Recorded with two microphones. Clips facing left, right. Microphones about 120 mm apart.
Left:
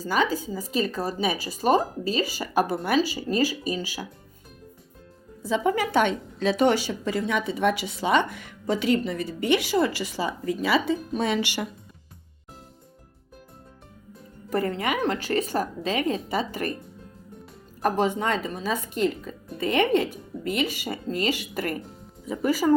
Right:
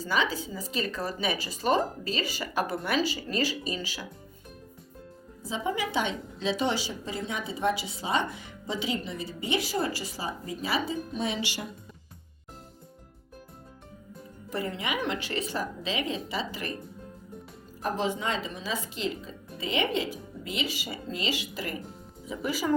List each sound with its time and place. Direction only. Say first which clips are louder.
0.0 s speech: left 4 dB; 45° left (ahead or behind)
5.5 s a woman's voice: left 7 dB; 60° left (ahead or behind)
14.5 s speech: left 6 dB; 50° left (ahead or behind)
17.8 s speech: left 6 dB; 50° left (ahead or behind)